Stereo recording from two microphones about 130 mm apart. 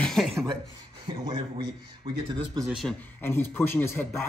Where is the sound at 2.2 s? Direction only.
35° right (ahead or behind).